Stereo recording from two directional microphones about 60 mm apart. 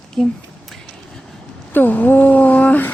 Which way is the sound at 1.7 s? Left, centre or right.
Left.